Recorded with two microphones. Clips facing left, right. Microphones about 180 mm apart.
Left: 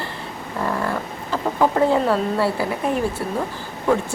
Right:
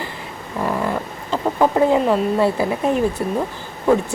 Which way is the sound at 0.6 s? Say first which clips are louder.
Right 2 dB; 15° right (ahead or behind).